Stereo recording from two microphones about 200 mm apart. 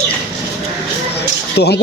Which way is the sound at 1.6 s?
55° left (ahead or behind).